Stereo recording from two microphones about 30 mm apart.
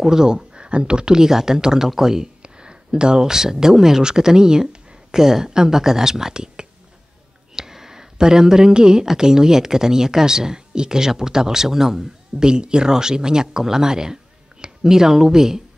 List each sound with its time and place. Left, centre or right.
0.0 s speech: centre
2.4 s speech: right
7.5 s a sound: centre
9.0 s speech: right
12.4 s speech: right